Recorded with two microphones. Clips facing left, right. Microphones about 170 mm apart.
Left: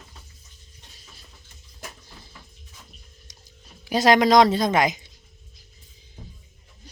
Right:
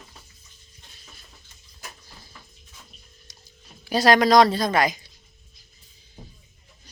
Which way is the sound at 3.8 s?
20° left (ahead or behind).